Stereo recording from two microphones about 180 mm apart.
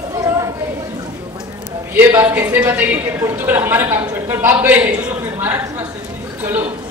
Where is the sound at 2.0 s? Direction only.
10° right (ahead or behind).